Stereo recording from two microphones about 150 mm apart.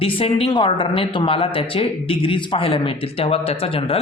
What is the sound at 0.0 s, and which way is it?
Speech, 35° left (ahead or behind).